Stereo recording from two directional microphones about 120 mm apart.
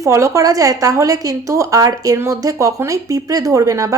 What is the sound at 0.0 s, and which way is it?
A woman's voice, 25° right (ahead or behind).